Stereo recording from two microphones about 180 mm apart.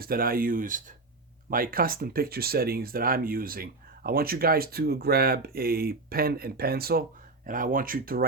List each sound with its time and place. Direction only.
0.0 s speech: 55° right (ahead or behind)